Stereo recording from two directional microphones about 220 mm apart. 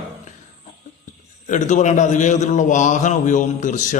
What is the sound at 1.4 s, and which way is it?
A man's voice, 35° left (ahead or behind).